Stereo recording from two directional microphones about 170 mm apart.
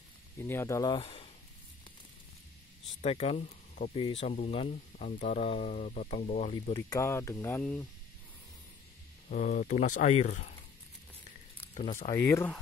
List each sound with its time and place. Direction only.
0.4 s speech: 15° left (ahead or behind)
0.9 s speech: 30° left (ahead or behind)
3.0 s speech: 40° left (ahead or behind)
6.5 s speech: 30° left (ahead or behind)
7.0 s speech: 15° left (ahead or behind)
9.3 s speech: 50° left (ahead or behind)
11.7 s speech: 45° left (ahead or behind)
12.1 s speech: 15° left (ahead or behind)